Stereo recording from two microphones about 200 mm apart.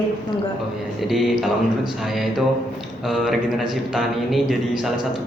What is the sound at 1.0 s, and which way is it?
A man's voice, centre (ahead or behind).